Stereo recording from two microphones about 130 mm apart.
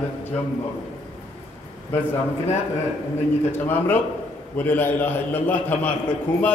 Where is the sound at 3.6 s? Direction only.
15° left (ahead or behind).